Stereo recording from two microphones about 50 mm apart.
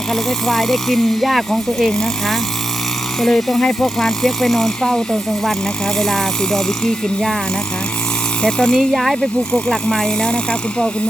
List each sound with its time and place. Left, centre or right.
0.1 s speech: centre
8.4 s speech: centre
8.9 s speech: centre
9.6 s speech: centre